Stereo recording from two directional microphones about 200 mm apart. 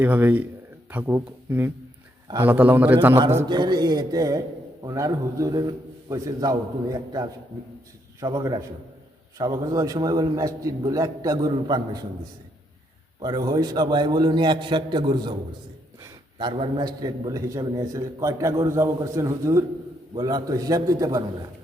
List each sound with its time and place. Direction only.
0.0 s a man's voice: 10° right (ahead or behind)
13.2 s a man's voice: 20° right (ahead or behind)
16.4 s a man's voice: 25° right (ahead or behind)